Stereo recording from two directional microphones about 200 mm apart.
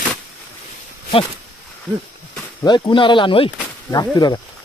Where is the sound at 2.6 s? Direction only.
25° left (ahead or behind).